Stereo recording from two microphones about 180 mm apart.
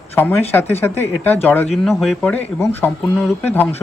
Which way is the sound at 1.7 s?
Centre (ahead or behind).